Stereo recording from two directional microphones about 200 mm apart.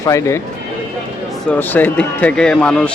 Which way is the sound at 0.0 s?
15° left (ahead or behind).